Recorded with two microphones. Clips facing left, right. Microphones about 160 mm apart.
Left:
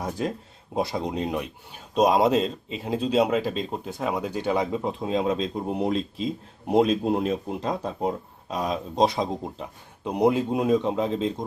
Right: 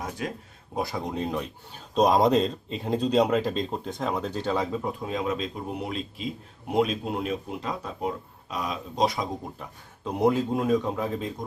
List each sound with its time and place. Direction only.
0.8 s speech: 20° left (ahead or behind)